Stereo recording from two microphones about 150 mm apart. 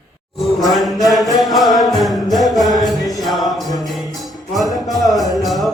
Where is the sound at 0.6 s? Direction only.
Centre (ahead or behind).